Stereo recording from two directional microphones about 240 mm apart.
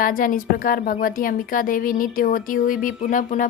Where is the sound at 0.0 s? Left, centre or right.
Left.